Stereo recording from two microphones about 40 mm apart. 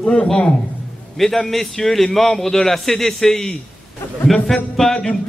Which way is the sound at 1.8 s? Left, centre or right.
Centre.